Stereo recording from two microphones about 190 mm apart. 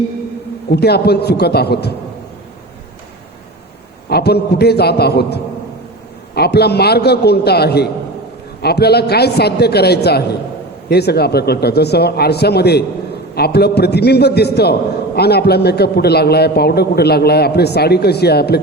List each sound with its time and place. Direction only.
0.7 s a man's voice: 60° left (ahead or behind)
4.1 s a man's voice: 60° left (ahead or behind)